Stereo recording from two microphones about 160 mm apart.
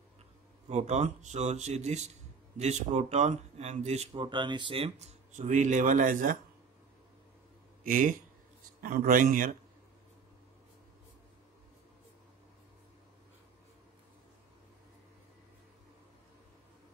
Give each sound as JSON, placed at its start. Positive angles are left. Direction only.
{"t": 0.7, "sound": "speech", "side_deg": -45}
{"t": 4.1, "sound": "speech", "side_deg": -30}
{"t": 7.8, "sound": "a man's voice", "side_deg": -55}